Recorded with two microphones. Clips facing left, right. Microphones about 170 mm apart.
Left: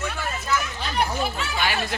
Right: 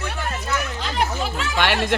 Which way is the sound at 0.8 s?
90° right.